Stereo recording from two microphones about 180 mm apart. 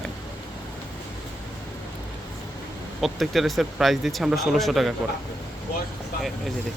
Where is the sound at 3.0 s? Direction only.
Centre (ahead or behind).